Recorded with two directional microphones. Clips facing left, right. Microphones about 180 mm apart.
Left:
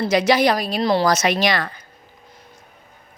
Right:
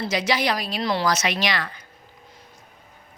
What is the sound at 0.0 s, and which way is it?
A woman's voice, 55° left (ahead or behind).